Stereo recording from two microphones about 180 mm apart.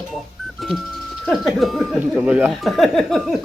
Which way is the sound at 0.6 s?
Centre (ahead or behind).